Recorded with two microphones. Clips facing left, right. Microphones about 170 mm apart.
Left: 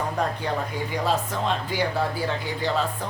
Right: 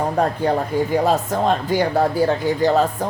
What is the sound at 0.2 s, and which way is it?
Speech, 50° right (ahead or behind).